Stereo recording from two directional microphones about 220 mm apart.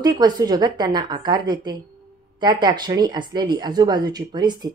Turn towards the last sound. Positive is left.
turn(degrees=-20)  # may be behind; listen again after turning